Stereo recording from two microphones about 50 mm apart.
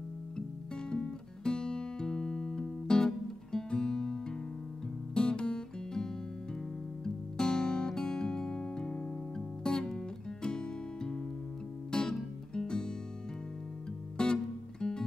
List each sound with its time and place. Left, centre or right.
0.8 s music: centre
3.5 s guitar: centre
5.1 s music: centre
7.3 s music: centre
14.1 s music: centre